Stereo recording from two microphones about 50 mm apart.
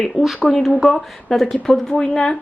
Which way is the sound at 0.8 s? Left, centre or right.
Centre.